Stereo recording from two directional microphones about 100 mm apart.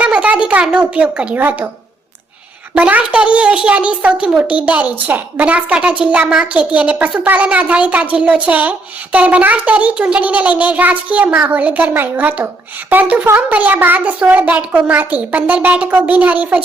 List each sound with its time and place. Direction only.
0.0 s speech: 15° right (ahead or behind)
2.7 s a child's voice: 15° right (ahead or behind)